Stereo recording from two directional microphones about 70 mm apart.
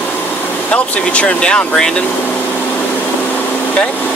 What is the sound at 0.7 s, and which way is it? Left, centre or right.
Speech, centre.